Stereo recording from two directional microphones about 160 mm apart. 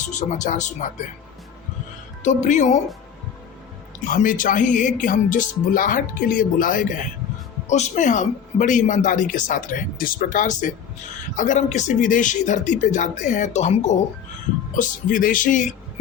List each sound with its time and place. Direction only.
0.2 s speech: 50° left (ahead or behind)
2.2 s speech: 50° left (ahead or behind)
4.1 s speech: 55° left (ahead or behind)
14.8 s speech: 55° left (ahead or behind)